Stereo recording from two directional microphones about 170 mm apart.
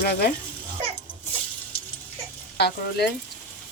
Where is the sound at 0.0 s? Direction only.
65° left (ahead or behind).